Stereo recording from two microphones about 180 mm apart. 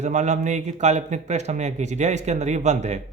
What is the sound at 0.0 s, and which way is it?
Speech, 40° right (ahead or behind).